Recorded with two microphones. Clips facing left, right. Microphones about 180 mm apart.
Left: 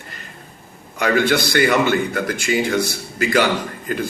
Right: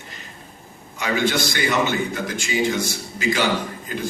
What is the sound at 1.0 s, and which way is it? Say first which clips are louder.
A man's voice: left 4 dB; 60° left (ahead or behind).